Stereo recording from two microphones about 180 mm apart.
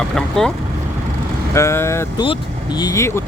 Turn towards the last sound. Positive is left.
turn(degrees=15)  # may be behind; listen again after turning